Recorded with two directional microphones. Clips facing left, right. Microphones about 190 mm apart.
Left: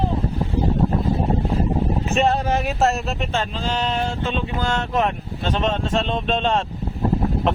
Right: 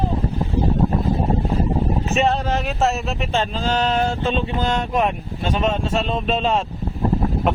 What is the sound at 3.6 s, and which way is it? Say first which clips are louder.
Speech: right 5 dB; 40° right (ahead or behind).